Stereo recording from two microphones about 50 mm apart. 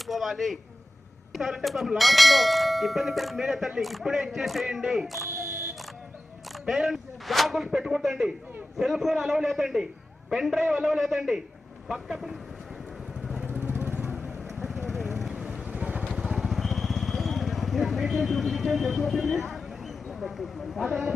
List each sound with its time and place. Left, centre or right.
0.0 s a sound: centre
1.3 s speech: centre
6.7 s speech: centre
7.6 s a man's voice: centre
13.6 s vehicle: right
14.6 s vehicle: centre
15.3 s vehicle: centre
16.1 s vehicle: centre